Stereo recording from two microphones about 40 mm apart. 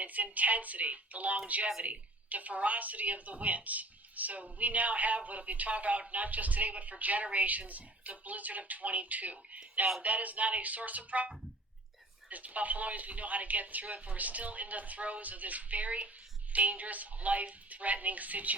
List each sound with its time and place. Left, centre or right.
0.0 s speech: right
12.3 s speech: right